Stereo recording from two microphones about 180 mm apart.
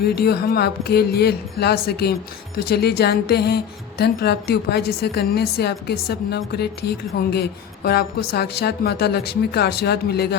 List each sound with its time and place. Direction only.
0.2 s speech: 60° left (ahead or behind)